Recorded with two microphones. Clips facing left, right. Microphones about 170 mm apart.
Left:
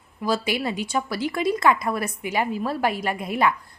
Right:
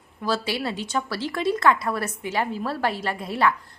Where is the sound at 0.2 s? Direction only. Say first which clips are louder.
Left 2 dB; 15° left (ahead or behind).